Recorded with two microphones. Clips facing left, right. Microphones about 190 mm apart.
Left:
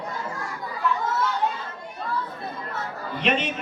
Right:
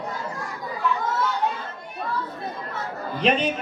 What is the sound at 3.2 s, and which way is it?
Music, 35° right (ahead or behind).